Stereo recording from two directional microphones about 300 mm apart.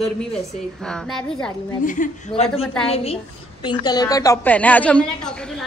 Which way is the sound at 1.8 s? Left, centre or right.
Left.